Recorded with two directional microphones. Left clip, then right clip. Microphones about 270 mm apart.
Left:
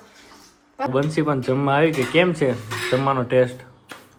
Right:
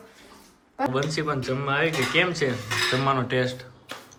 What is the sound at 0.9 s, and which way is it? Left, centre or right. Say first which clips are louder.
A man's voice: left 8 dB; centre.